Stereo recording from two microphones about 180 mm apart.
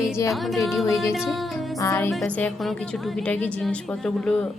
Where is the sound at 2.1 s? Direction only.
10° left (ahead or behind).